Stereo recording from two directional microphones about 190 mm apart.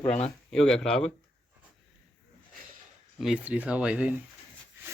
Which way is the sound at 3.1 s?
5° right (ahead or behind).